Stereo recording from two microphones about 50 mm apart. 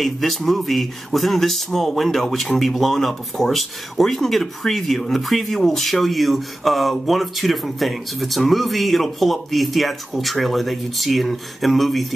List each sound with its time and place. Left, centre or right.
0.0 s speech: centre